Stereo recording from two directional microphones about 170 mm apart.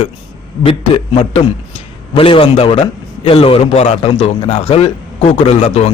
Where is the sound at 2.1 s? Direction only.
30° left (ahead or behind).